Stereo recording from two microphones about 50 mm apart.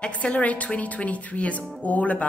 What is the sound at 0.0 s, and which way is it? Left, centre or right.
A woman's voice, left.